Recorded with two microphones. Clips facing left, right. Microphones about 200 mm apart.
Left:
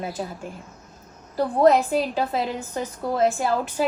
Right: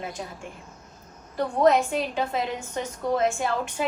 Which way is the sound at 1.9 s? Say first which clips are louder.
Left 3 dB; 35° left (ahead or behind).